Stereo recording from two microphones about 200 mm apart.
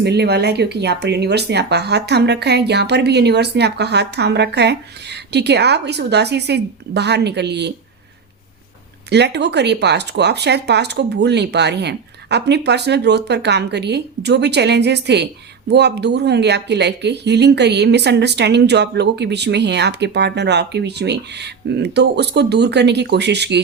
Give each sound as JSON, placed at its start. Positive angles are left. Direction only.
{"t": 0.0, "sound": "speech", "side_deg": -55}
{"t": 9.0, "sound": "speech", "side_deg": -60}